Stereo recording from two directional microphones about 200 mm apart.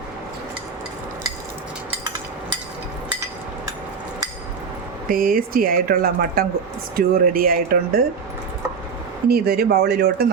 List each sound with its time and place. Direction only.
5.0 s speech: 45° right (ahead or behind)
9.3 s speech: 50° right (ahead or behind)